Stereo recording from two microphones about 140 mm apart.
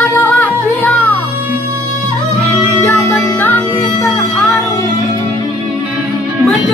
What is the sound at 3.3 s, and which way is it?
Music, 10° left (ahead or behind).